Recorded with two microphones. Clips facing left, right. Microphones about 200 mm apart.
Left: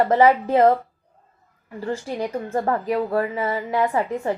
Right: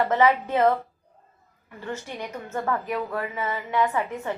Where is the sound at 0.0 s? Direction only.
35° left (ahead or behind).